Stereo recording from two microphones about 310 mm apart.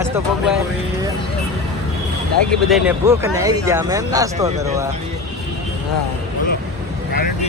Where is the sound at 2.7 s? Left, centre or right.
Centre.